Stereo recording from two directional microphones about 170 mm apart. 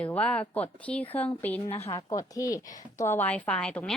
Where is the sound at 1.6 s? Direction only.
35° left (ahead or behind).